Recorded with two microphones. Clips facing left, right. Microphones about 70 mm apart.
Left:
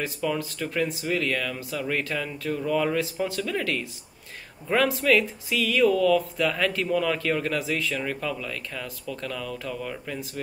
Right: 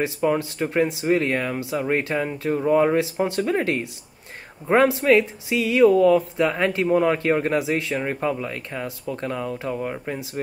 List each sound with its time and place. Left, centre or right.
0.2 s speech: right